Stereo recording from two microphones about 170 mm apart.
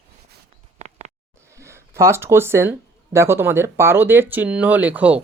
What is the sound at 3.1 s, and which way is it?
Speech, 15° right (ahead or behind).